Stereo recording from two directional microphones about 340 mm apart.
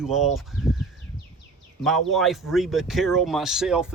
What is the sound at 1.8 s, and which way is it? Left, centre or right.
Speech, centre.